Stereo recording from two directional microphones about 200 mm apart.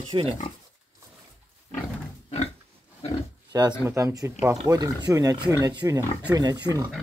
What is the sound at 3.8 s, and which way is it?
Speech, 15° right (ahead or behind).